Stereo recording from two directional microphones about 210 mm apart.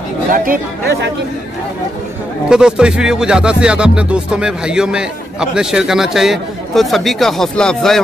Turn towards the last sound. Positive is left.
turn(degrees=5)  # may be behind; listen again after turning